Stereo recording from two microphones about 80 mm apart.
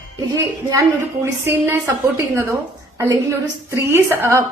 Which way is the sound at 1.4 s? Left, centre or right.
Right.